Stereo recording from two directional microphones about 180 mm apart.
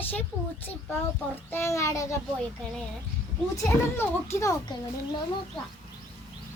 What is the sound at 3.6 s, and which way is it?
Speech, 10° left (ahead or behind).